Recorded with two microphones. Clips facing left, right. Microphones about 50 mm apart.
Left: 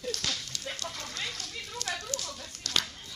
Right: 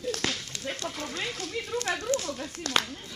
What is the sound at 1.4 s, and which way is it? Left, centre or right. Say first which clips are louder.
Speech: right 8 dB; right.